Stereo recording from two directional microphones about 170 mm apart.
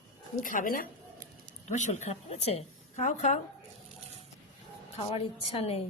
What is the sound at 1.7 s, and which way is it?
A woman's voice, 45° left (ahead or behind).